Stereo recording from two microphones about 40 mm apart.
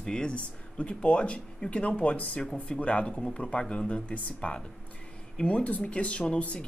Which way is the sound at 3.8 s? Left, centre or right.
Left.